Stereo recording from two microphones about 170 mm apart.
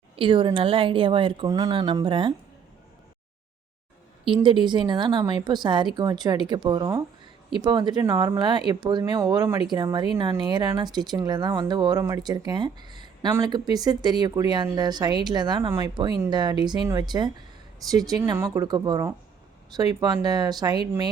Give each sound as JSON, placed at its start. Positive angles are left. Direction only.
{"t": 0.2, "sound": "a woman's voice", "side_deg": -30}
{"t": 4.4, "sound": "speech", "side_deg": -25}